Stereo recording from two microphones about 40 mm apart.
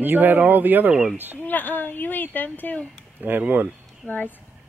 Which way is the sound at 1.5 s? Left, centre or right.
Left.